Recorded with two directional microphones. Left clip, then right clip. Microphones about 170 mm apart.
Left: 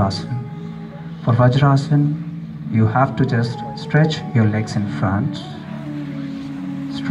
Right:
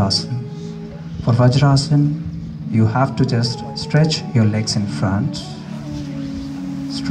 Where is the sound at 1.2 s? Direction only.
35° right (ahead or behind).